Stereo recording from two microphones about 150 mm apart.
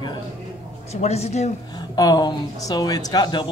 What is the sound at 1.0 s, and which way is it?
Speech, 45° left (ahead or behind).